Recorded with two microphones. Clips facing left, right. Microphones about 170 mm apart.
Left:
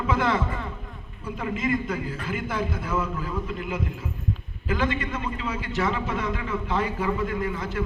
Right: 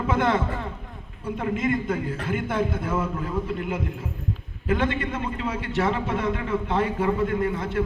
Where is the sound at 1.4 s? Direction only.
55° right (ahead or behind).